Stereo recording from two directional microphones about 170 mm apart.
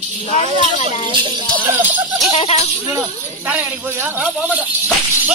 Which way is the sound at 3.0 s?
10° right (ahead or behind).